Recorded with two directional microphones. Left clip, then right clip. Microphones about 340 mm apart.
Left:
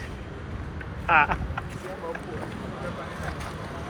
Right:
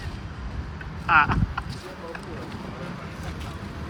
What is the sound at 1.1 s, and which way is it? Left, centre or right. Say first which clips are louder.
Speech: right 1 dB; centre.